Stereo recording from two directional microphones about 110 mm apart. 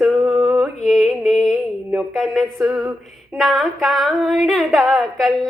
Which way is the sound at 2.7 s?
20° right (ahead or behind).